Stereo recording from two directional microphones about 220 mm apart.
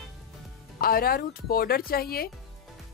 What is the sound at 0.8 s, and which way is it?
Speech, 40° left (ahead or behind).